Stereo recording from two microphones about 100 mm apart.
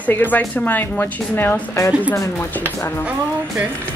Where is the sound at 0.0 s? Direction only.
20° left (ahead or behind).